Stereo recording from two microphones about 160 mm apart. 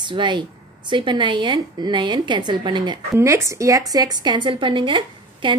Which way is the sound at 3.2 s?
20° right (ahead or behind).